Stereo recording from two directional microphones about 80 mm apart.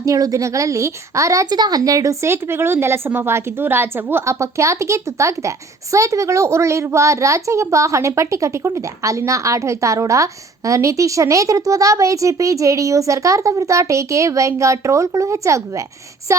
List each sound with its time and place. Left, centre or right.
0.0 s a woman's voice: right
1.5 s speech: right
2.2 s a woman's voice: right